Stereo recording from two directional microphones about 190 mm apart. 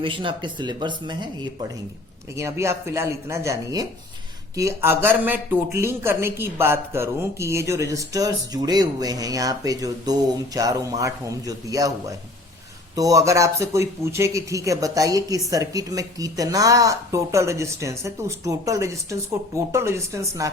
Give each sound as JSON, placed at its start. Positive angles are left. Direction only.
{"t": 0.0, "sound": "speech", "side_deg": -25}
{"t": 2.3, "sound": "speech", "side_deg": -15}